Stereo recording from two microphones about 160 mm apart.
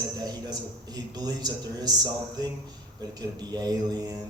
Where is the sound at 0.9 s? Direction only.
25° right (ahead or behind).